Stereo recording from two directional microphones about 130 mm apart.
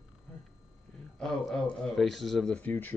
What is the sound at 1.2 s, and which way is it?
Speech, 5° left (ahead or behind).